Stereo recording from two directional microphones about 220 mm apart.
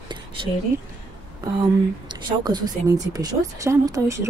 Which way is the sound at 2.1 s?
20° right (ahead or behind).